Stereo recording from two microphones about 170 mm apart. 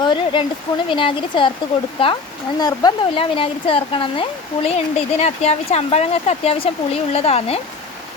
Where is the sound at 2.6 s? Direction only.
25° left (ahead or behind).